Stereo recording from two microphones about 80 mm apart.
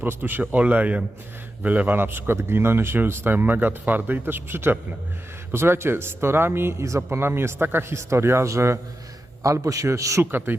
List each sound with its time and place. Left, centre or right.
0.0 s a man's voice: right